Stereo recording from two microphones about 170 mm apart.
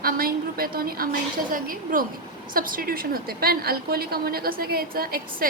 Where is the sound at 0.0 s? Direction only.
60° right (ahead or behind).